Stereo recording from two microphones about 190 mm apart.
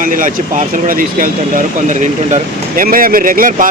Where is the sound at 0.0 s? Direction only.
45° right (ahead or behind).